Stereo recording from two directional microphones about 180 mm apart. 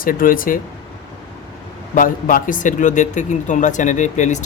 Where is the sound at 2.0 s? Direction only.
50° left (ahead or behind).